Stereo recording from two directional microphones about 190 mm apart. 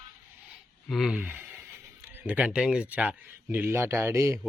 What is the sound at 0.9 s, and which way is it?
Speech, centre (ahead or behind).